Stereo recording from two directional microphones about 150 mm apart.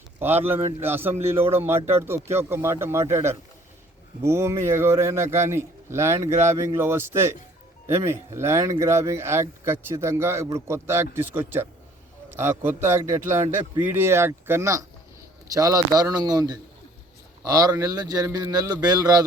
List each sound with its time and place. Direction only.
0.2 s speech: 15° right (ahead or behind)